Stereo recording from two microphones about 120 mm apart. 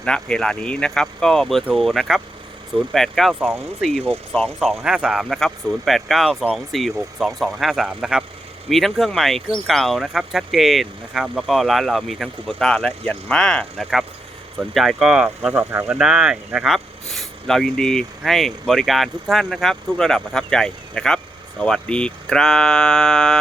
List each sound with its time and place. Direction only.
0.0 s speech: 5° left (ahead or behind)
15.7 s speech: 20° right (ahead or behind)
16.0 s speech: 5° right (ahead or behind)